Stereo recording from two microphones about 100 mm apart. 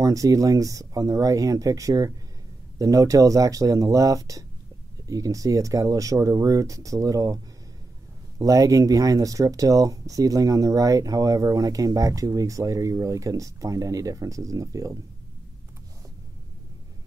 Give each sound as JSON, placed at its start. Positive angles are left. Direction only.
{"t": 0.0, "sound": "speech", "side_deg": -35}
{"t": 8.4, "sound": "speech", "side_deg": -35}